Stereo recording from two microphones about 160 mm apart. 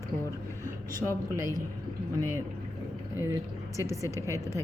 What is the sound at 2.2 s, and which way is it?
A woman's voice, 20° right (ahead or behind).